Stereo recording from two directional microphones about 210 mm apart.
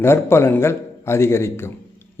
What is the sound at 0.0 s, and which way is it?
A man's voice, 10° left (ahead or behind).